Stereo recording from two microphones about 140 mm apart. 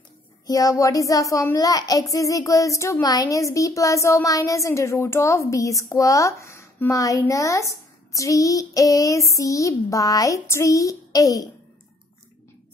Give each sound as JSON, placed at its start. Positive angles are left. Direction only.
{"t": 0.5, "sound": "a woman's voice", "side_deg": 25}